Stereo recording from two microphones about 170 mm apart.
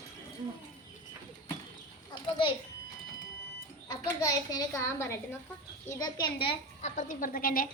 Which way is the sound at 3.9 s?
20° left (ahead or behind).